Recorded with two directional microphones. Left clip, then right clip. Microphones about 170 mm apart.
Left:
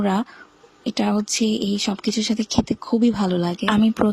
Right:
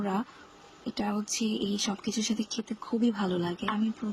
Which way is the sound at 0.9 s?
40° left (ahead or behind).